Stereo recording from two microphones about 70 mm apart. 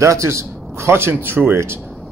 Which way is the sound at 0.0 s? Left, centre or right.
Right.